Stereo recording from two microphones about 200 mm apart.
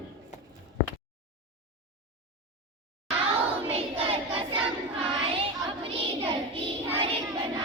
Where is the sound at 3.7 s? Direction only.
30° right (ahead or behind).